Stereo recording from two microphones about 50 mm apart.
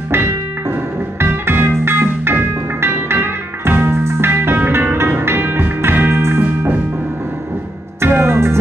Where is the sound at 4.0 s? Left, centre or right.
Right.